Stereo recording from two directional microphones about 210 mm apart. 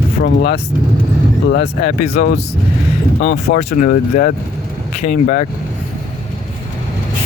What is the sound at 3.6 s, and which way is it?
Speech, 35° left (ahead or behind).